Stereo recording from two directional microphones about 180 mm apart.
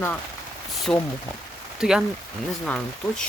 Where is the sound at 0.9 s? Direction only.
5° left (ahead or behind).